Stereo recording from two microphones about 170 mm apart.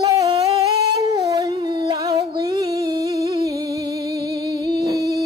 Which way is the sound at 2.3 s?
20° right (ahead or behind).